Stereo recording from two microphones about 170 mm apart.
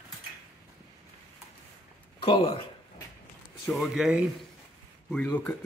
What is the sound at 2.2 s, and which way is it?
Speech, 35° left (ahead or behind).